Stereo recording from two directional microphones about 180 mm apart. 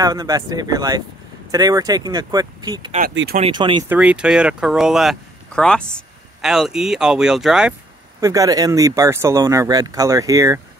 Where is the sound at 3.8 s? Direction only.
10° right (ahead or behind).